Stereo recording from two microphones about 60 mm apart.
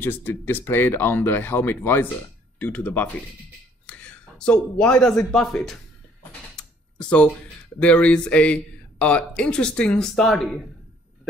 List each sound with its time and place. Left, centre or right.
0.0 s speech: left; by 5.8 s centre
6.5 s a sound: centre
7.8 s speech: centre